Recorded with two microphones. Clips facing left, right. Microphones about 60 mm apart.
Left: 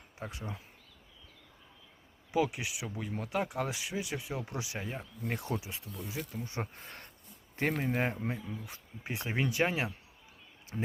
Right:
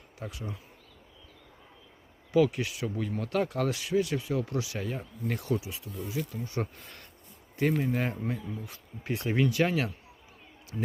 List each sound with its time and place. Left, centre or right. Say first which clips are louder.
0.2 s speech: right 2 dB; left
2.3 s speech: right 6 dB; centre; by 7.8 s left
7.8 s speech: right 2 dB; left
10.7 s speech: right 2 dB; left